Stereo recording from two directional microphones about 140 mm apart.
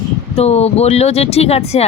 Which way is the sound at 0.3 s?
50° left (ahead or behind).